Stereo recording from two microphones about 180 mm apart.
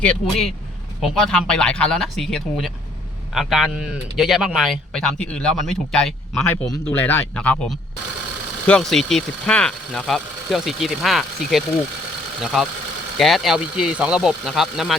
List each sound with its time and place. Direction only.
0.0 s speech: 5° left (ahead or behind)